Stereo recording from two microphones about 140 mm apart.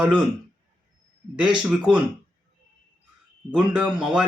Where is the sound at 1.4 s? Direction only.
5° right (ahead or behind).